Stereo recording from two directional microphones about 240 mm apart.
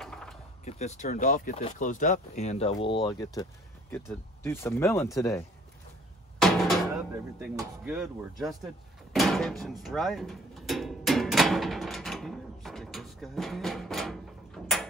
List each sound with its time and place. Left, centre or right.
0.0 s door: centre
0.7 s speech: left
6.4 s drum: centre
7.5 s speech: centre
9.1 s drawer open or close: centre
14.6 s a sound: centre